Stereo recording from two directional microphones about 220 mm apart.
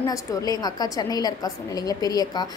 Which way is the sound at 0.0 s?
15° left (ahead or behind).